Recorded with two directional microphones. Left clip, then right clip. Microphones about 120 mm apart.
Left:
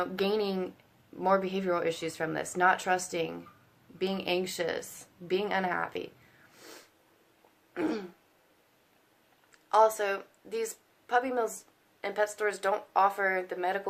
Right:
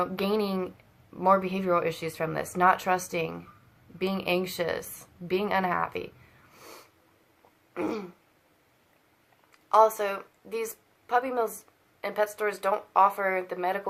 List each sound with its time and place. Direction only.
0.0 s a woman's voice: 35° left (ahead or behind)
7.7 s a sound: 40° left (ahead or behind)
9.6 s a woman's voice: 30° left (ahead or behind)